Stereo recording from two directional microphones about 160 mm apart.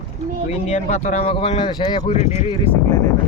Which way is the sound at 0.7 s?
45° left (ahead or behind).